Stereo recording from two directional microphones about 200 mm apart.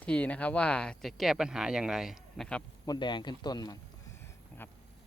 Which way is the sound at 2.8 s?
20° left (ahead or behind).